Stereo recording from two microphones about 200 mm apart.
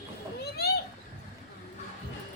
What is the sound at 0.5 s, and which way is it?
Children playing, 55° left (ahead or behind).